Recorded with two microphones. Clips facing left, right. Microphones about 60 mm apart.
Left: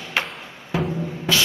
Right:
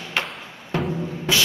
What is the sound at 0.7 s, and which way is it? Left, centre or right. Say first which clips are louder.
Music: left 1 dB; centre.